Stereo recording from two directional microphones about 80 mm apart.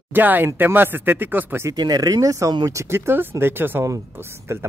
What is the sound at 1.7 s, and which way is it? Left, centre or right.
Speech, right.